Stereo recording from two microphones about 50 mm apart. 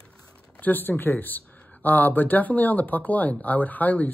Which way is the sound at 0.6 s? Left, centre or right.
Left.